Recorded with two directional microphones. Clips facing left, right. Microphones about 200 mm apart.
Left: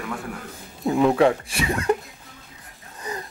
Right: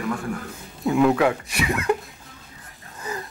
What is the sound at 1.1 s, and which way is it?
Speech, 30° left (ahead or behind).